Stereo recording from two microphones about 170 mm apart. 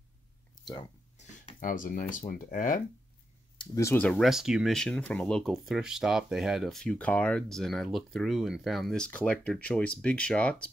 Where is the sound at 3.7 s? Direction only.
15° left (ahead or behind).